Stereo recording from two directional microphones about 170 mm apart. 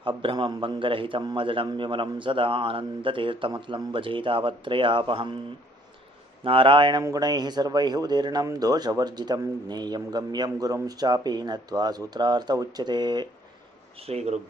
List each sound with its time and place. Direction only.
0.0 s speech: 30° right (ahead or behind)
6.4 s speech: 30° right (ahead or behind)
13.9 s speech: 35° right (ahead or behind)